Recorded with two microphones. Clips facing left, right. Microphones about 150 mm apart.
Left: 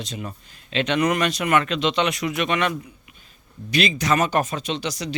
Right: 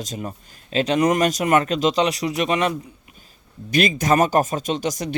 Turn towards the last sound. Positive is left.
turn(degrees=-45)  # may be behind; listen again after turning